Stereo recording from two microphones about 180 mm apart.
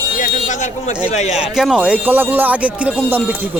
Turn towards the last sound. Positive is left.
turn(degrees=-10)  # may be behind; listen again after turning